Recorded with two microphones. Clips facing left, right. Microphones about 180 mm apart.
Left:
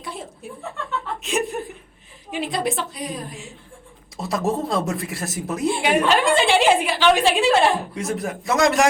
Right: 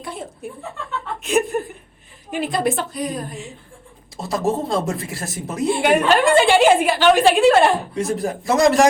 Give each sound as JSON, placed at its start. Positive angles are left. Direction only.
{"t": 0.0, "sound": "chuckle", "side_deg": 0}
{"t": 2.3, "sound": "speech", "side_deg": 0}
{"t": 6.8, "sound": "a woman's voice", "side_deg": -50}
{"t": 7.6, "sound": "speech", "side_deg": 0}